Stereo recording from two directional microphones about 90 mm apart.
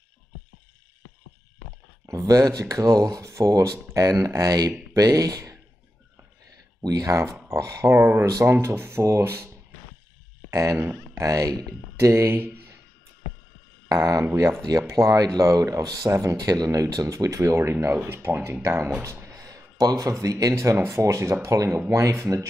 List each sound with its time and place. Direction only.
2.0 s speech: 35° right (ahead or behind)
6.8 s speech: 40° right (ahead or behind)
10.5 s speech: 40° right (ahead or behind)
12.0 s speech: 30° right (ahead or behind)
13.8 s speech: 40° right (ahead or behind)
14.3 s speech: 30° right (ahead or behind)
14.7 s speech: 40° right (ahead or behind)